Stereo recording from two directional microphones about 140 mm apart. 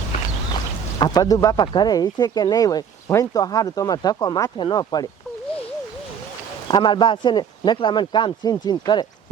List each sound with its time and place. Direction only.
0.9 s a man's voice: 25° left (ahead or behind)
6.7 s a man's voice: 35° left (ahead or behind)